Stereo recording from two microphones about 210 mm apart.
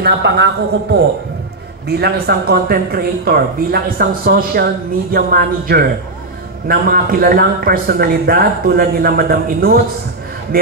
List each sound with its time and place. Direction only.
0.0 s a man's voice: 55° right (ahead or behind)
1.9 s a man's voice: 50° right (ahead or behind)